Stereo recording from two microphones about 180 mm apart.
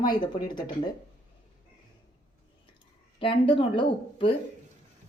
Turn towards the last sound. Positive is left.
turn(degrees=30)  # may be behind; listen again after turning